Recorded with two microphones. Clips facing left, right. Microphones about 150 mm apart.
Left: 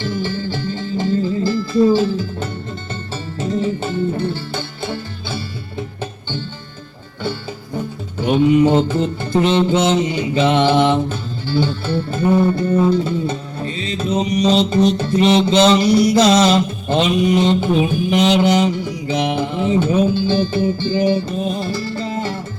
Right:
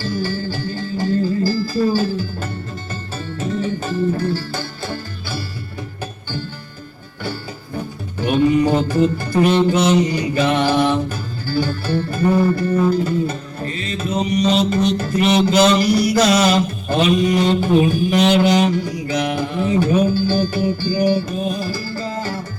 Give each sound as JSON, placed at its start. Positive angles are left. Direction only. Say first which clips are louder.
{"t": 0.0, "sound": "music", "louder": "even", "side_deg": 20}
{"t": 1.5, "sound": "music", "louder": "left 4 dB", "side_deg": 20}
{"t": 8.2, "sound": "music", "louder": "left 2 dB", "side_deg": 20}